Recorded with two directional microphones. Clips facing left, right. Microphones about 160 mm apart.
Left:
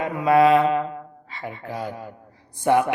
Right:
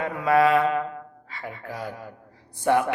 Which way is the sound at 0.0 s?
20° left (ahead or behind).